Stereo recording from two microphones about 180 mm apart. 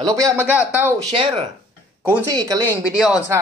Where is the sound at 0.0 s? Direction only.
20° right (ahead or behind).